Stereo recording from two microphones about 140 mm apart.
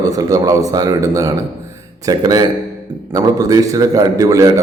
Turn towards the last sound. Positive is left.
turn(degrees=-25)  # may be behind; listen again after turning